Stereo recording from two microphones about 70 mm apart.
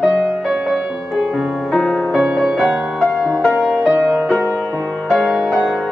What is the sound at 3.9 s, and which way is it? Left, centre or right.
Music, right.